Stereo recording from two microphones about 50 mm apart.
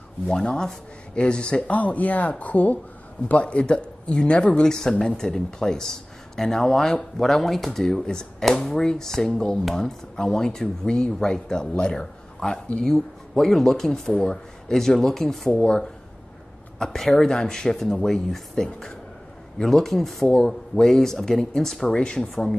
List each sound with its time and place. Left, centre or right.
0.3 s speech: centre
15.5 s speech: left
16.7 s speech: centre
20.2 s speech: centre
22.3 s speech: centre